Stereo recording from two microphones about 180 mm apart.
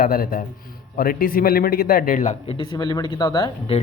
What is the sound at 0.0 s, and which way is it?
A man's voice, 55° left (ahead or behind).